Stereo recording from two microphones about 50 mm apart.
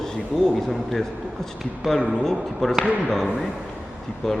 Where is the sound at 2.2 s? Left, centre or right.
Centre.